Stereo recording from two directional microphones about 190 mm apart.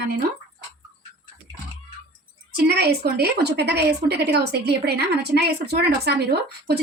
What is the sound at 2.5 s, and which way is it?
A woman's voice, 60° right (ahead or behind).